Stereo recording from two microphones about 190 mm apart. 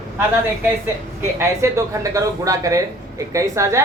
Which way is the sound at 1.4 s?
15° right (ahead or behind).